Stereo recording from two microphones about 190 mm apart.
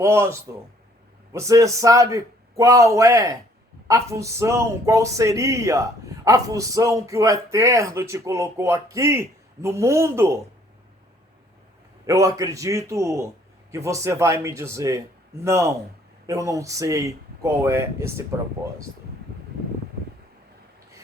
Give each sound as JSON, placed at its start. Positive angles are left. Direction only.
{"t": 0.0, "sound": "speech", "side_deg": -15}
{"t": 12.0, "sound": "speech", "side_deg": -15}